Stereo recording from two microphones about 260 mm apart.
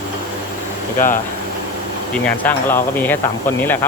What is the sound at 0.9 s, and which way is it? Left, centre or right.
Speech, left.